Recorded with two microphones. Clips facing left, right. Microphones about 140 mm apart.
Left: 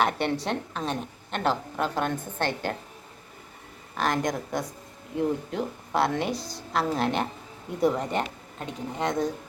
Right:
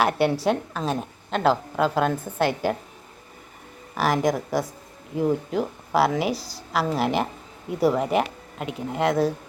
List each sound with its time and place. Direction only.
0.0 s a woman's voice: 5° right (ahead or behind)
1.7 s a woman's voice: 90° right
2.4 s a woman's voice: 10° right (ahead or behind)
3.9 s a woman's voice: 5° right (ahead or behind)